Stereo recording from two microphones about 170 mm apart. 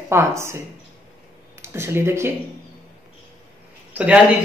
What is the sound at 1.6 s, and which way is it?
Speech, 15° right (ahead or behind).